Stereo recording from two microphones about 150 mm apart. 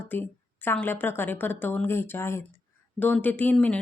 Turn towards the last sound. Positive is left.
turn(degrees=10)  # may be behind; listen again after turning